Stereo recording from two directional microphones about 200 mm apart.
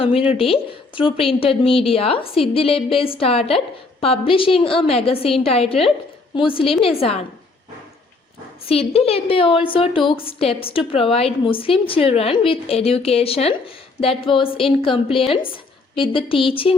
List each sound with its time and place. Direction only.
0.0 s a woman's voice: 30° left (ahead or behind)
8.6 s a woman's voice: 30° left (ahead or behind)